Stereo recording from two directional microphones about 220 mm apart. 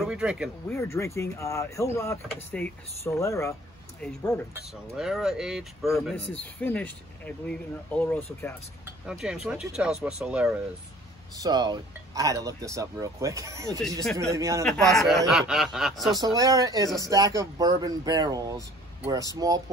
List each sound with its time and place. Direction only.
0.0 s speech: 5° right (ahead or behind)
0.7 s speech: 10° left (ahead or behind); by 10.6 s 5° right (ahead or behind)
11.3 s speech: 20° right (ahead or behind)
14.6 s speech: centre (ahead or behind)
16.2 s speech: 15° right (ahead or behind)